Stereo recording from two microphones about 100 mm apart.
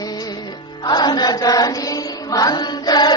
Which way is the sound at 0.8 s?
45° left (ahead or behind).